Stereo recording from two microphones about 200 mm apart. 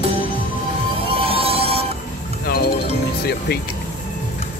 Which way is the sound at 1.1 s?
30° right (ahead or behind).